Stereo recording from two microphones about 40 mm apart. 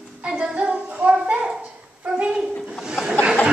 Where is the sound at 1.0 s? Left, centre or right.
Right.